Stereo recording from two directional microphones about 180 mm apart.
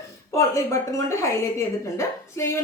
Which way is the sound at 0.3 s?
15° left (ahead or behind).